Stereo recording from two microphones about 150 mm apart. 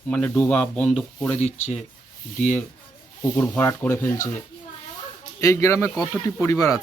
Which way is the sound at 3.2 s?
15° left (ahead or behind).